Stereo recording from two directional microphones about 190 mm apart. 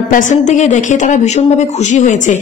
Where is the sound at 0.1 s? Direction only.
40° left (ahead or behind).